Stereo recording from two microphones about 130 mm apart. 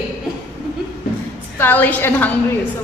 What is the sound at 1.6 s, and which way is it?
Speech, 15° left (ahead or behind).